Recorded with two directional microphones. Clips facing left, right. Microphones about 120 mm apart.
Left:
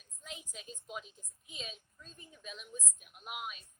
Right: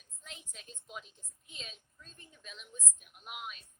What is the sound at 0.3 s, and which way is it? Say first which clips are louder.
A woman's voice: left 4 dB; 10° left (ahead or behind).